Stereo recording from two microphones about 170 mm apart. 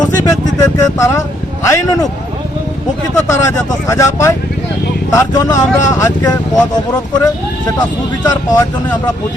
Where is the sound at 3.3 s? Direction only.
20° left (ahead or behind).